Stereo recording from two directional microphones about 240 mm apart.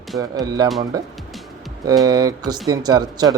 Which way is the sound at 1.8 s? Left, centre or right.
Centre.